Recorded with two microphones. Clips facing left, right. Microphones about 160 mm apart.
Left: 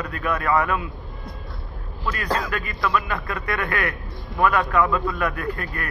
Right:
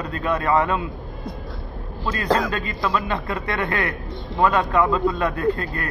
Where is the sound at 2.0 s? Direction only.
25° right (ahead or behind).